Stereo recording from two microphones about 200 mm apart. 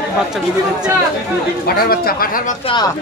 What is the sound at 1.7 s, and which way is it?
Speech, 50° left (ahead or behind).